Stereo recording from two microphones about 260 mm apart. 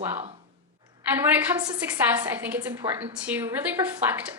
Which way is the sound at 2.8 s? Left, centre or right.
Right.